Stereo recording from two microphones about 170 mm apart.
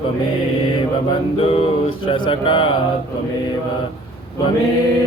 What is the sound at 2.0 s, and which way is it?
Speech, 30° left (ahead or behind).